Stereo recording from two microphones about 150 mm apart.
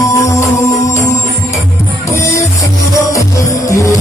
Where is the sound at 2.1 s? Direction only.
20° left (ahead or behind).